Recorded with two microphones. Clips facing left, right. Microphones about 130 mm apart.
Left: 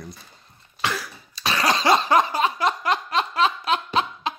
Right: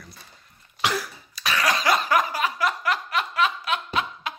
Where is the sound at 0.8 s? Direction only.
10° right (ahead or behind).